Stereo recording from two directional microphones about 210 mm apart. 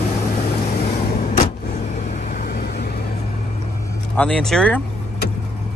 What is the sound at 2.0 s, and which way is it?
Vehicle, 35° left (ahead or behind).